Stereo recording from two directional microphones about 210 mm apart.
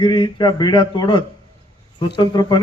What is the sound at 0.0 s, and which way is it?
A man's voice, 20° left (ahead or behind).